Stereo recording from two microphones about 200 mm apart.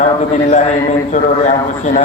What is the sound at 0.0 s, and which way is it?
A man's voice, 35° left (ahead or behind).